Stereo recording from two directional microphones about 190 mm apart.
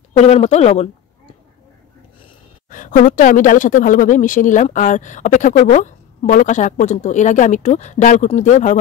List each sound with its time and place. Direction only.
0.2 s a woman's voice: 35° left (ahead or behind)
2.7 s a woman's voice: 45° left (ahead or behind)